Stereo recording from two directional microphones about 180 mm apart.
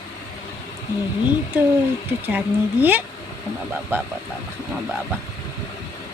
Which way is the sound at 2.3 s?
10° right (ahead or behind).